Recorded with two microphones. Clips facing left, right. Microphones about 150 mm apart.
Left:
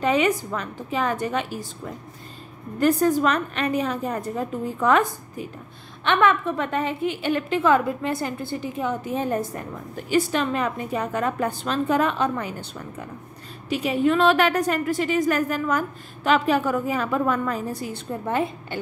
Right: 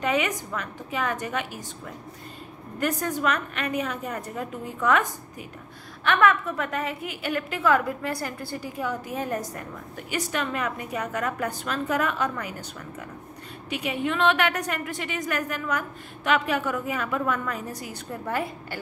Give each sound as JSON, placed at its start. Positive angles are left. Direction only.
{"t": 0.0, "sound": "a woman's voice", "side_deg": 30}
{"t": 2.8, "sound": "a woman's voice", "side_deg": 30}